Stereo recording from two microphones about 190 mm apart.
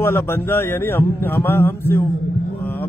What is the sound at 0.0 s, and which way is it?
A man's voice, 10° left (ahead or behind).